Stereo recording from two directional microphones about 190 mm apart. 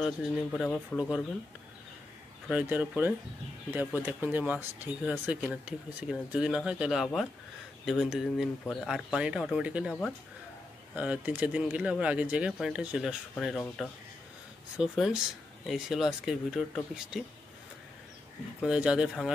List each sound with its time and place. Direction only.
0.0 s speech: centre (ahead or behind)
2.4 s speech: 10° right (ahead or behind)
11.0 s speech: 5° right (ahead or behind)
18.6 s speech: 5° right (ahead or behind)